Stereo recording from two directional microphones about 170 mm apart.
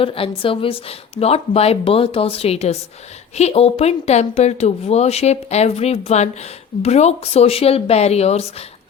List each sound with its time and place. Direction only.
0.0 s speech: 30° left (ahead or behind)